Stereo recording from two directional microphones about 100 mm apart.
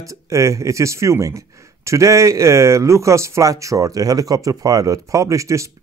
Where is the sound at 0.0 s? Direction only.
30° right (ahead or behind).